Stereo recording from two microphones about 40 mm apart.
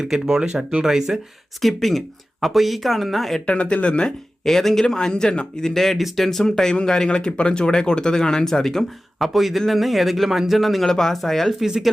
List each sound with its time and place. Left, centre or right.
0.0 s speech: centre
1.6 s a man's voice: centre
3.4 s speech: left
4.4 s speech: centre
6.0 s a man's voice: centre
6.4 s speech: centre
9.1 s a man's voice: centre